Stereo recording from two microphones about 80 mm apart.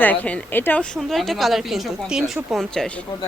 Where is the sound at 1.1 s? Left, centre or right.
Centre.